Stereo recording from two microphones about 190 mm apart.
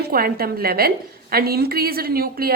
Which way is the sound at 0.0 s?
50° right (ahead or behind).